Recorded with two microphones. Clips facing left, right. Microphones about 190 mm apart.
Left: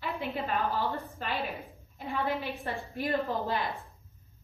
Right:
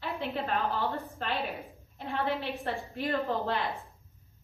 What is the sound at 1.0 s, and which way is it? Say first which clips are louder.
A woman's voice: right 1 dB; centre (ahead or behind).